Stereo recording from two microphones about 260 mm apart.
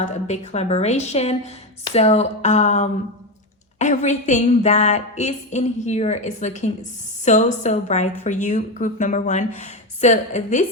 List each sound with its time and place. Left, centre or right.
0.0 s a woman's voice: left